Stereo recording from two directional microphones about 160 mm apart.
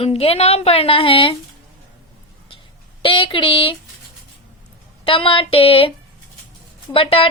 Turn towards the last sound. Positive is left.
turn(degrees=35)  # may be behind; listen again after turning